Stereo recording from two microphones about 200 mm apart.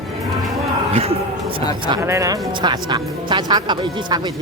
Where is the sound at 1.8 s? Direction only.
20° right (ahead or behind).